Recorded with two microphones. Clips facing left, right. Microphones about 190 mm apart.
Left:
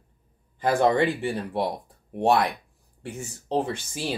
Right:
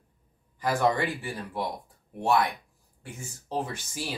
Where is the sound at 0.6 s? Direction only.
30° left (ahead or behind).